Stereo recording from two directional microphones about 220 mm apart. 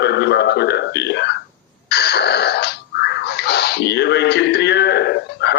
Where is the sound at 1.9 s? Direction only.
50° left (ahead or behind).